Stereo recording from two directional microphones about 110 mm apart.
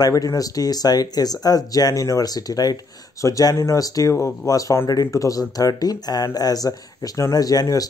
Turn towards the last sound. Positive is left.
turn(degrees=35)  # may be behind; listen again after turning